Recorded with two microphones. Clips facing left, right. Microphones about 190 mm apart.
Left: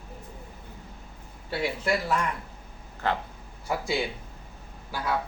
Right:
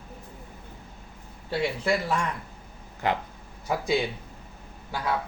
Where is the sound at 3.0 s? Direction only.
15° right (ahead or behind).